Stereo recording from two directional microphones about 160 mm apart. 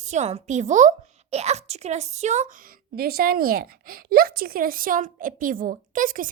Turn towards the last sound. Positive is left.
turn(degrees=-60)  # may be behind; listen again after turning